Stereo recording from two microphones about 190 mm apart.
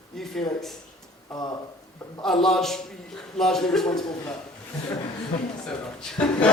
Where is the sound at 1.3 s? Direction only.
20° left (ahead or behind).